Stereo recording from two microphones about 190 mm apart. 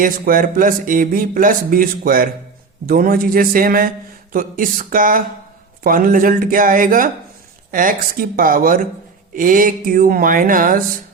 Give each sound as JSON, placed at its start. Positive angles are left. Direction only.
{"t": 0.0, "sound": "a man's voice", "side_deg": -45}